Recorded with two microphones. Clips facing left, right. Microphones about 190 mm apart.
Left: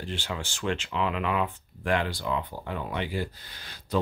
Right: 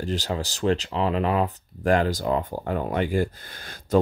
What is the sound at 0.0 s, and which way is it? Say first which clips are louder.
Speech: right 7 dB; 40° right (ahead or behind).